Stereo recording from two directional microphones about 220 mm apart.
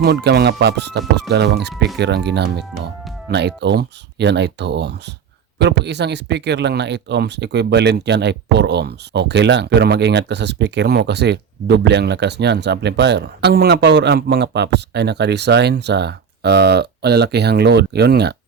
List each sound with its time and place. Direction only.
0.0 s speech: 50° right (ahead or behind)